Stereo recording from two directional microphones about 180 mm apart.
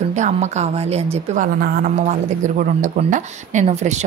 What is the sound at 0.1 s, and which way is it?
A woman's voice, 40° right (ahead or behind).